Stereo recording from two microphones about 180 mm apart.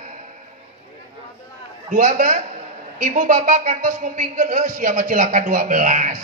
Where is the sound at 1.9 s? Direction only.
45° right (ahead or behind).